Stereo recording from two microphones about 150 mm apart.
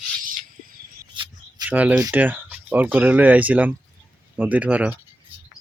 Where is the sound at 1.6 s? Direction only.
10° right (ahead or behind).